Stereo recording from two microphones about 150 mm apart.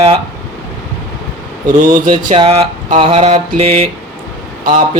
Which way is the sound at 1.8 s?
65° right (ahead or behind).